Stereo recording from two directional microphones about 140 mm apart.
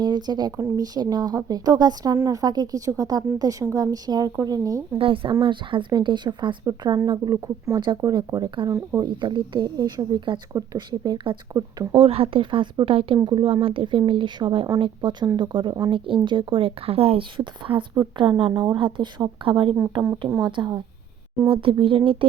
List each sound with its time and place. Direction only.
0.0 s a woman's voice: 30° right (ahead or behind)
4.9 s speech: 40° right (ahead or behind)
8.7 s a woman's voice: 20° right (ahead or behind)
9.0 s speech: 35° right (ahead or behind)
11.9 s speech: 45° right (ahead or behind)